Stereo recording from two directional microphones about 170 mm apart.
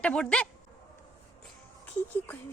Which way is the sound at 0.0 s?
5° left (ahead or behind).